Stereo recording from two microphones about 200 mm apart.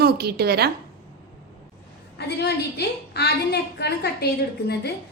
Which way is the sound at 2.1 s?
55° left (ahead or behind).